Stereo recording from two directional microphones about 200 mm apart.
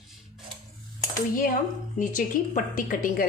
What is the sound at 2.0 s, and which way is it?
A woman's voice, 40° left (ahead or behind).